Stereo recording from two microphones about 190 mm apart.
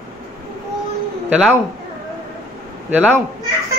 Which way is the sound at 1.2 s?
5° right (ahead or behind).